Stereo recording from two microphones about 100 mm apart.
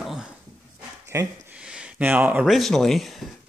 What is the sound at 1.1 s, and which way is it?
Speech, 30° right (ahead or behind).